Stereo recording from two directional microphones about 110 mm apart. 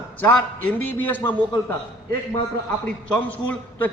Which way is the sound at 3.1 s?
15° left (ahead or behind).